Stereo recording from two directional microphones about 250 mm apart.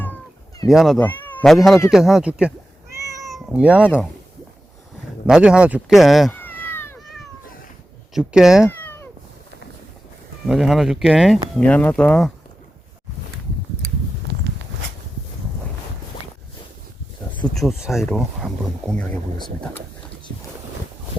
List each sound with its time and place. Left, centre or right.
0.7 s speech: centre
2.9 s cat: centre
3.2 s cat: centre
5.2 s speech: centre
8.1 s speech: centre
8.6 s cat: centre
10.4 s speech: centre
14.3 s walk: right
17.3 s speech: centre